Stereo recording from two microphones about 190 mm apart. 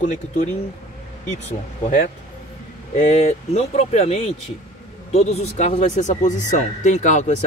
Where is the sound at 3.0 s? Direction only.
40° left (ahead or behind).